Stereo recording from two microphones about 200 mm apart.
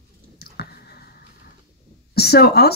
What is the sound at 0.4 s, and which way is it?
Clicking, 50° left (ahead or behind).